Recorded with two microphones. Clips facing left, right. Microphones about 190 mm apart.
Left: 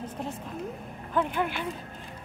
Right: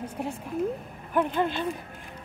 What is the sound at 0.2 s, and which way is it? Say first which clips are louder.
Speech: right 3 dB; 10° right (ahead or behind).